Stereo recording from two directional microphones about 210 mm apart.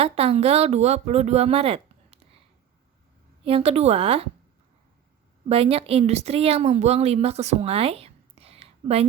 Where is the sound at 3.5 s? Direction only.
30° right (ahead or behind).